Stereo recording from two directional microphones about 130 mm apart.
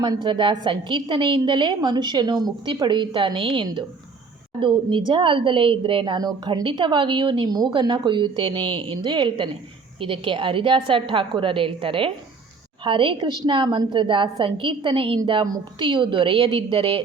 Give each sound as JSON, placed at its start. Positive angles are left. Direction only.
{"t": 0.0, "sound": "a woman's voice", "side_deg": -35}